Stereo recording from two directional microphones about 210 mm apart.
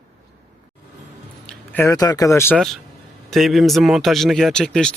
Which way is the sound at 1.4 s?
10° left (ahead or behind).